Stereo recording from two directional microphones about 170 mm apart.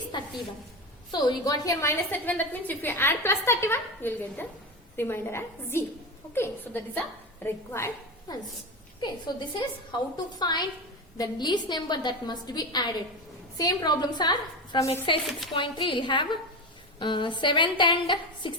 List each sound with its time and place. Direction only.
0.1 s a sound: 25° left (ahead or behind)
1.1 s a woman's voice: 20° left (ahead or behind)
9.0 s a woman's voice: 25° left (ahead or behind)